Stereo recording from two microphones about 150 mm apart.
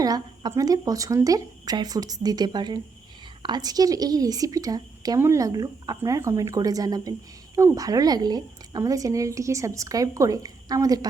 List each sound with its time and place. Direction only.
0.0 s a woman's voice: 25° right (ahead or behind)